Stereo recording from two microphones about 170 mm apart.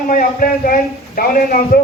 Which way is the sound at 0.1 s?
55° left (ahead or behind).